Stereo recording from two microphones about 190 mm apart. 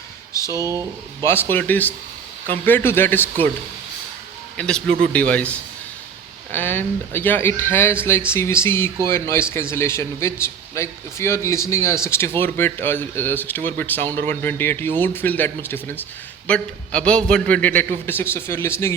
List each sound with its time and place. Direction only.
0.5 s speech: 15° right (ahead or behind)
1.2 s speech: 10° left (ahead or behind)
4.5 s a man's voice: 5° left (ahead or behind)